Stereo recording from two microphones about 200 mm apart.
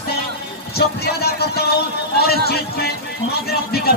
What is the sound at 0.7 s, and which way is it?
A man's voice, 50° left (ahead or behind).